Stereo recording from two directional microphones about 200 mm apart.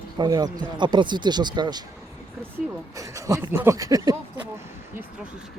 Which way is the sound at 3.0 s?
15° right (ahead or behind).